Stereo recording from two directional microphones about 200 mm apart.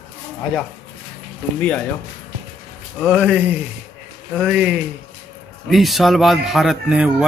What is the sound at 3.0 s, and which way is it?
Speech, 5° right (ahead or behind).